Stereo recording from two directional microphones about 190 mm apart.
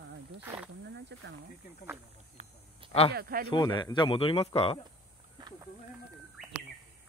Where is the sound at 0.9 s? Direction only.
65° right (ahead or behind).